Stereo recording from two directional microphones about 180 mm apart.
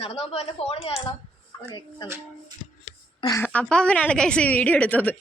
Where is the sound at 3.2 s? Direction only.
20° left (ahead or behind).